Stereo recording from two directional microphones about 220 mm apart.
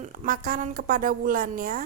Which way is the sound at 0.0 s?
35° right (ahead or behind).